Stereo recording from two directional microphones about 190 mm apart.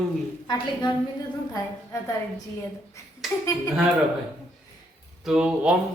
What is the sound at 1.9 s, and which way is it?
Speech, 15° left (ahead or behind).